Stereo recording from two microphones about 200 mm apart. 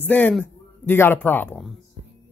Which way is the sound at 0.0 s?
5° left (ahead or behind).